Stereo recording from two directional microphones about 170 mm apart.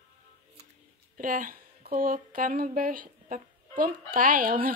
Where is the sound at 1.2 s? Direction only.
55° right (ahead or behind).